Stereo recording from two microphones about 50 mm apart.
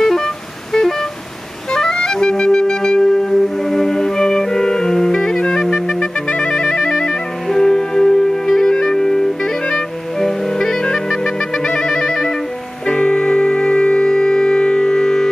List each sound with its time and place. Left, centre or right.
0.0 s vehicle: centre
1.7 s clarinet: centre
12.8 s music: centre